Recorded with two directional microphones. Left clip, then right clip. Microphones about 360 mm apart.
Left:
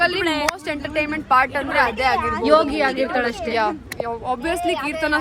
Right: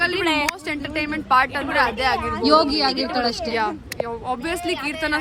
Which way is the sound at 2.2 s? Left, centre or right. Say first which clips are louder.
Left 3 dB; left.